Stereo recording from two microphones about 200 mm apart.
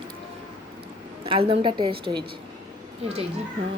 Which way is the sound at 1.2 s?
25° right (ahead or behind).